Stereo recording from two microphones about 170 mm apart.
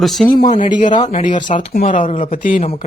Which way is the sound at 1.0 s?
45° left (ahead or behind).